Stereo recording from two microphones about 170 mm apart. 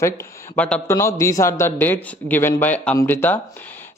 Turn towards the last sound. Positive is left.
turn(degrees=10)  # may be behind; listen again after turning